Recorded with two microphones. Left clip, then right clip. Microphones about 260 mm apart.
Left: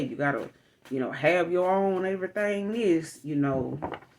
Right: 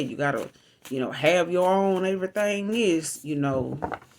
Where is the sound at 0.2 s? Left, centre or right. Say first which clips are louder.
Right 2 dB; right.